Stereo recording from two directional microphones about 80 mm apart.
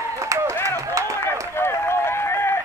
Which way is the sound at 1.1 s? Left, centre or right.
Left.